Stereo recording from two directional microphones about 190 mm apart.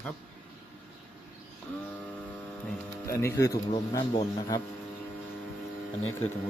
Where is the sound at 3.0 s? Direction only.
15° left (ahead or behind).